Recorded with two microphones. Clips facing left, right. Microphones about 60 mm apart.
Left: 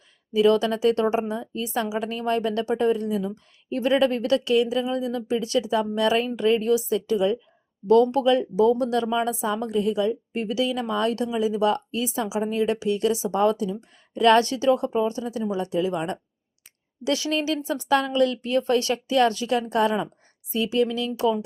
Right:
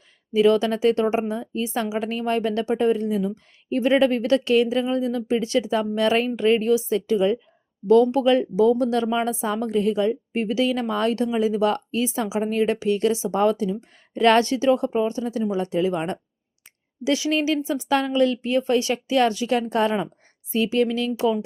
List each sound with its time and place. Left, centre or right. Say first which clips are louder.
0.3 s a woman's voice: right 1 dB; right